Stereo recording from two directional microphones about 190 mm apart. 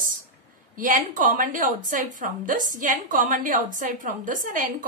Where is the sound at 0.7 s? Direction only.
45° right (ahead or behind).